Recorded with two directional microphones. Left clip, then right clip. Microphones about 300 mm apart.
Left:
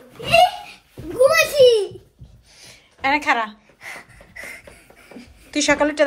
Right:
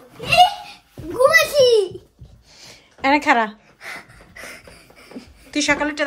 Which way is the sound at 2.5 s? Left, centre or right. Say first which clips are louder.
Right 2 dB; centre.